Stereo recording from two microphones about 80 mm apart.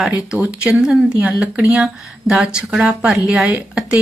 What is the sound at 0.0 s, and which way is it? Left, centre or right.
Speech, centre.